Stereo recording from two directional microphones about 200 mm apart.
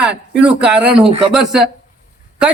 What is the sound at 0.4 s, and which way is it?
Speech, 5° right (ahead or behind).